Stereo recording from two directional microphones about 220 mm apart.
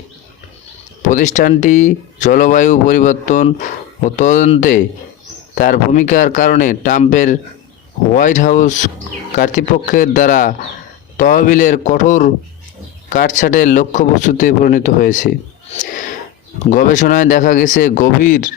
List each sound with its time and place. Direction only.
1.0 s speech: 35° left (ahead or behind)
16.6 s speech: 35° left (ahead or behind)